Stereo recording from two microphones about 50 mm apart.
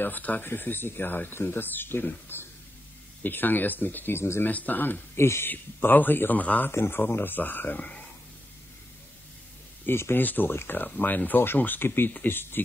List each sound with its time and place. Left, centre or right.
0.0 s speech: left
2.3 s a sound: left
3.2 s speech: left
4.5 s speech: left
5.1 s speech: left
5.5 s speech: left
6.7 s speech: left
9.8 s speech: left
10.8 s speech: left